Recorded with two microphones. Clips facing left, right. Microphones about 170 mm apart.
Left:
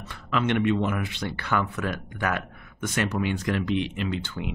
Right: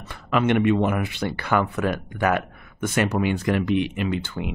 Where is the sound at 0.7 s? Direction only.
50° right (ahead or behind).